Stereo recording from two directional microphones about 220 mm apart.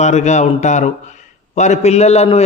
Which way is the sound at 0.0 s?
30° left (ahead or behind).